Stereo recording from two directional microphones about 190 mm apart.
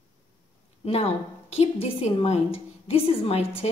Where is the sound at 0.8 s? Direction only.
30° left (ahead or behind).